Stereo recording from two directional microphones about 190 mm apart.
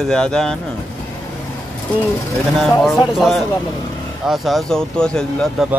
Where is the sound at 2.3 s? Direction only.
Centre (ahead or behind).